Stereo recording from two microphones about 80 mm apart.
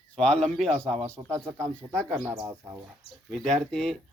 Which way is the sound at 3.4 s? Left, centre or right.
Centre.